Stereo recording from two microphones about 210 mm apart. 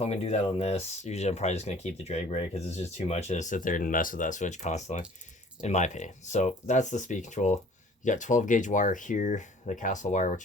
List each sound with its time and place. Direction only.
0.0 s speech: 30° left (ahead or behind)